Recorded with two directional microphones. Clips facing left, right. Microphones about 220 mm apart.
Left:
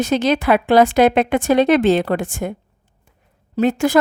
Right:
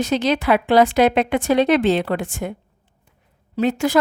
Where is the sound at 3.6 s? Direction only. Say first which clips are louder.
Left 3 dB; 50° left (ahead or behind).